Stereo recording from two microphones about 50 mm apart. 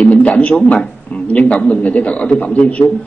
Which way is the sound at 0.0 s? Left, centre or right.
Left.